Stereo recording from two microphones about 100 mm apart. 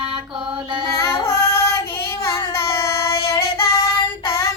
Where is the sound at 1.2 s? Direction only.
30° left (ahead or behind).